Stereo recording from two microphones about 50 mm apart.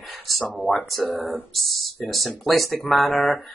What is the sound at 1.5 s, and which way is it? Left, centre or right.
Speech, centre.